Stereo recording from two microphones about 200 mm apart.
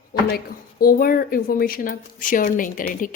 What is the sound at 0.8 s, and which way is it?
Speech, 45° left (ahead or behind).